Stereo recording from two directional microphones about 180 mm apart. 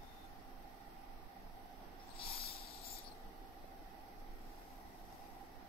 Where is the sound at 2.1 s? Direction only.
55° left (ahead or behind).